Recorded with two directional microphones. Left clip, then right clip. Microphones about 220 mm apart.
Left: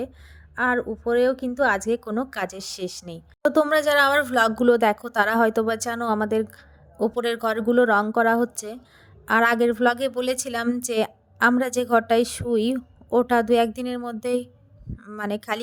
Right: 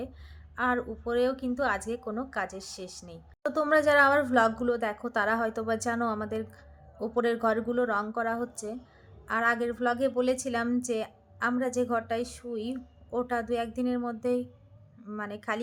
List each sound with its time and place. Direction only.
0.5 s a woman's voice: 25° left (ahead or behind)